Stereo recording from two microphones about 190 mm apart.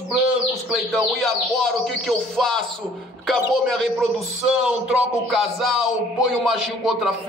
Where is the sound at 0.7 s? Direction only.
Centre (ahead or behind).